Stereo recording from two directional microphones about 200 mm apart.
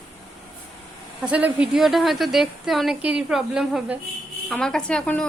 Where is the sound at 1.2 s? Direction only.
5° right (ahead or behind).